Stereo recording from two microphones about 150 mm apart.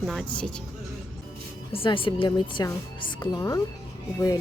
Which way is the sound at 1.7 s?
35° left (ahead or behind).